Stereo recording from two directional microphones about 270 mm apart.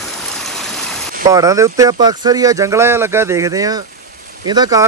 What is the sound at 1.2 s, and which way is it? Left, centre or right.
Speech, centre.